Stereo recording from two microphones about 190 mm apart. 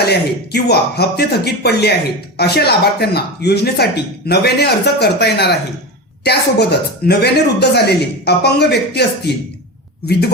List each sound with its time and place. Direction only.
0.0 s speech: 55° left (ahead or behind)